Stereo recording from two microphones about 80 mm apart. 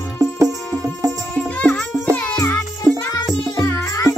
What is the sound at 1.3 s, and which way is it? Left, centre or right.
Music, centre.